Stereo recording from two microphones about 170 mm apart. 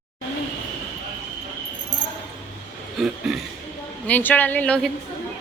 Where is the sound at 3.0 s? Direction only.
Centre (ahead or behind).